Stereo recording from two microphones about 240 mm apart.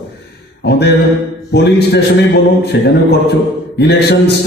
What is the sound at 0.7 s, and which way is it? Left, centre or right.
Mantra, left.